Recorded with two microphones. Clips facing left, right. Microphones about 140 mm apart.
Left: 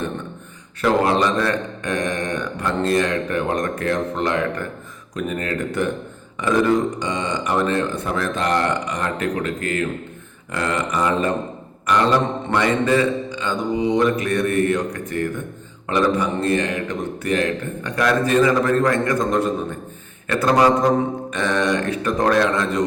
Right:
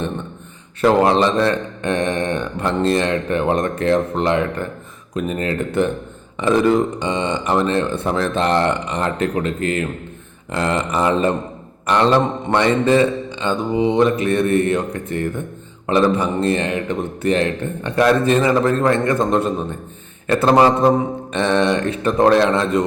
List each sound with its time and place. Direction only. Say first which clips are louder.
0.8 s speech: right 4 dB; 25° right (ahead or behind)